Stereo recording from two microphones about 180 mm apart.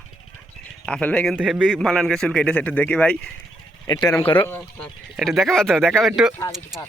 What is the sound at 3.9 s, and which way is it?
Speech, 20° left (ahead or behind).